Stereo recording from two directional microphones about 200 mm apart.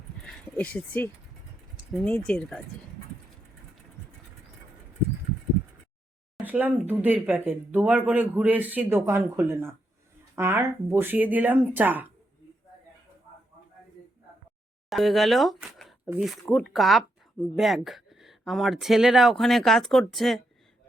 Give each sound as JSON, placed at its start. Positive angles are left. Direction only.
{"t": 0.3, "sound": "speech", "side_deg": 5}
{"t": 6.3, "sound": "speech", "side_deg": -10}
{"t": 14.8, "sound": "speech", "side_deg": 0}